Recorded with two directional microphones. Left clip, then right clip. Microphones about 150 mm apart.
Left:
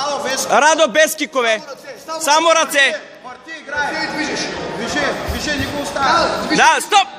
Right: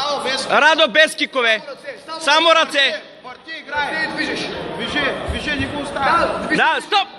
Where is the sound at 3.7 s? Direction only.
90° left.